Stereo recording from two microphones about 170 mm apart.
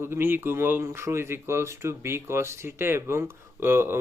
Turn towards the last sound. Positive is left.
turn(degrees=-15)  # may be behind; listen again after turning